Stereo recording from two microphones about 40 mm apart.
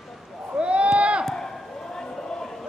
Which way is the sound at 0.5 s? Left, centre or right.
Right.